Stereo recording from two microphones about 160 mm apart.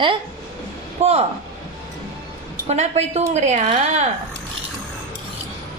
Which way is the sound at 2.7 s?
45° right (ahead or behind).